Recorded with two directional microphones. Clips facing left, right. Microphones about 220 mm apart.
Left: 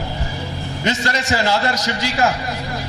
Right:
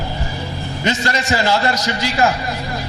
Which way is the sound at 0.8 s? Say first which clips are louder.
Right 1 dB; 15° right (ahead or behind).